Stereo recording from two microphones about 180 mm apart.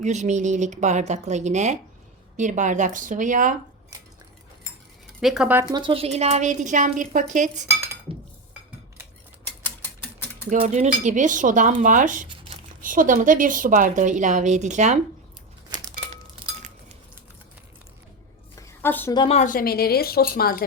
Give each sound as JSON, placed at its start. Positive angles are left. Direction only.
{"t": 0.0, "sound": "a woman's voice", "side_deg": -40}
{"t": 5.2, "sound": "speech", "side_deg": -5}
{"t": 5.6, "sound": "speech", "side_deg": -25}
{"t": 8.1, "sound": "cutlery", "side_deg": -30}
{"t": 10.5, "sound": "a woman's voice", "side_deg": -45}
{"t": 18.8, "sound": "a woman's voice", "side_deg": 10}
{"t": 19.1, "sound": "speech", "side_deg": 25}
{"t": 19.4, "sound": "speech", "side_deg": 50}